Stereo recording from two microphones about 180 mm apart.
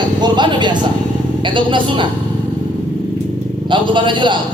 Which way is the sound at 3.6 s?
25° right (ahead or behind).